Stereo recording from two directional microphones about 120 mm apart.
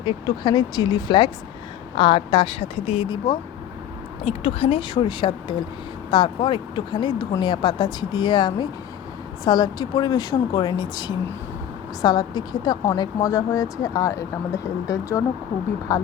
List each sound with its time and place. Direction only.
0.0 s speech: 40° left (ahead or behind)
4.3 s speech: 55° left (ahead or behind); by 16.0 s 30° left (ahead or behind)